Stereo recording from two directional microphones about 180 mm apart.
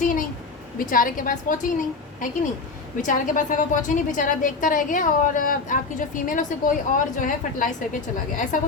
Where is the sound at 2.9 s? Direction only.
45° left (ahead or behind).